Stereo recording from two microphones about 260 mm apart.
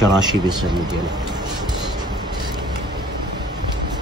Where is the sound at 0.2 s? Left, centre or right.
Centre.